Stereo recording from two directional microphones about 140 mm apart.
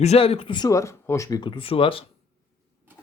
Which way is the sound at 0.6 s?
25° left (ahead or behind).